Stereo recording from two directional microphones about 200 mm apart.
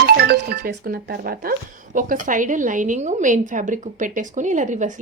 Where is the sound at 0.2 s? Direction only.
50° right (ahead or behind).